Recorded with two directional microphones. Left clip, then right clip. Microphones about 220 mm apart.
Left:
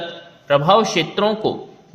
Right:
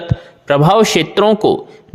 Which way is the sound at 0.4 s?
50° right (ahead or behind).